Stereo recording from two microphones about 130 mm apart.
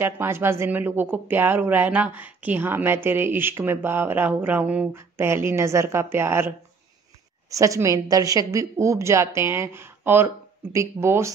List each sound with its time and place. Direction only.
0.0 s a woman's voice: 20° right (ahead or behind)